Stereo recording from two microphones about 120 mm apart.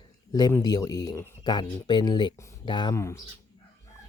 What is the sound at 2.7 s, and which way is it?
Speech, 40° left (ahead or behind).